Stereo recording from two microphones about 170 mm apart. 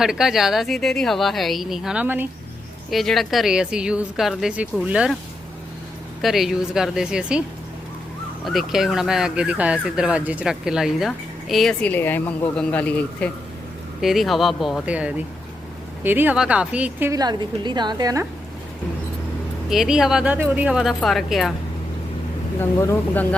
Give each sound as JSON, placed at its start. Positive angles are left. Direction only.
{"t": 0.0, "sound": "speech", "side_deg": -5}
{"t": 6.2, "sound": "speech", "side_deg": 0}
{"t": 8.4, "sound": "speech", "side_deg": 0}
{"t": 17.2, "sound": "a woman's voice", "side_deg": -25}
{"t": 19.7, "sound": "speech", "side_deg": -5}
{"t": 22.6, "sound": "speech", "side_deg": 10}